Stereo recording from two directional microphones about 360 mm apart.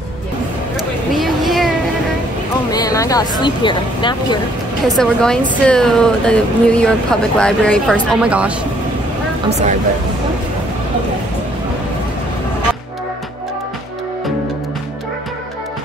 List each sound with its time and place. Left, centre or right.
1.2 s a sound: centre
2.7 s speech: centre
4.9 s speech: centre
9.5 s speech: centre